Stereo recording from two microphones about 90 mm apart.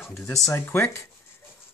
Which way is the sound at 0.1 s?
35° left (ahead or behind).